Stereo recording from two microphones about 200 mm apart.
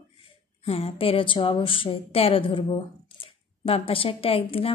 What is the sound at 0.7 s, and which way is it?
A woman's voice, 30° left (ahead or behind).